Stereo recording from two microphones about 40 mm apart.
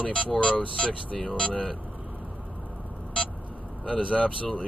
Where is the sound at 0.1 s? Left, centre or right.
Left.